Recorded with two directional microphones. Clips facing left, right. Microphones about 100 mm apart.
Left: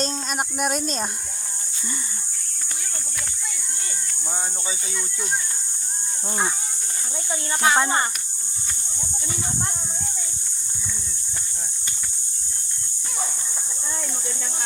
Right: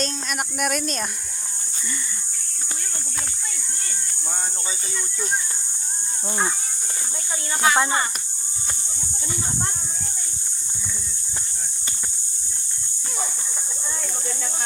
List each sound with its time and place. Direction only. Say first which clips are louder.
0.0 s speech: left 1 dB; 25° left (ahead or behind)
7.6 s speech: even; 20° left (ahead or behind)